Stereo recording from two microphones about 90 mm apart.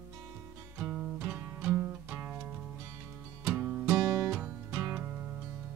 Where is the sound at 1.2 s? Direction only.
20° right (ahead or behind).